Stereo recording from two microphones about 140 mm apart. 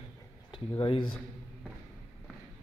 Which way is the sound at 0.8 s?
40° left (ahead or behind).